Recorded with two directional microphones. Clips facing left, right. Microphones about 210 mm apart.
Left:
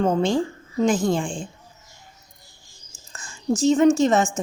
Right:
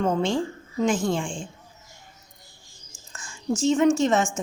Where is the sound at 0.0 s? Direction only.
35° left (ahead or behind).